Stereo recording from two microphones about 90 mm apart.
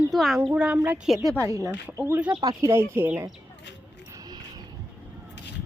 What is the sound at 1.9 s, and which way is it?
Speech, 30° right (ahead or behind).